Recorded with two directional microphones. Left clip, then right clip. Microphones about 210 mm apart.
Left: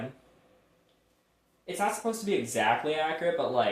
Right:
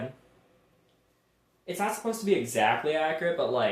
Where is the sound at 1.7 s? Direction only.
30° right (ahead or behind).